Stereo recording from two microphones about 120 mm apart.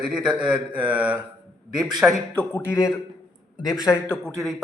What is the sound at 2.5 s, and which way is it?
A man's voice, 25° left (ahead or behind).